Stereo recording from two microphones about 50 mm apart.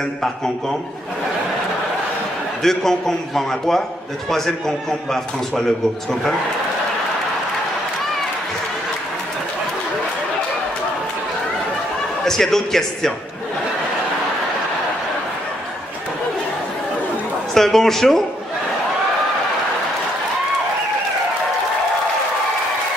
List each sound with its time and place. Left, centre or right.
2.6 s a man's voice: centre
12.3 s a man's voice: centre
17.6 s a man's voice: centre